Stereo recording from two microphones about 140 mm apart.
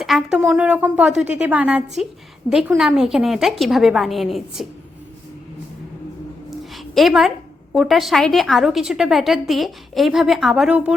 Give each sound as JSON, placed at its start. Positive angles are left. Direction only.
{"t": 0.0, "sound": "a woman's voice", "side_deg": 0}
{"t": 6.7, "sound": "a woman's voice", "side_deg": 0}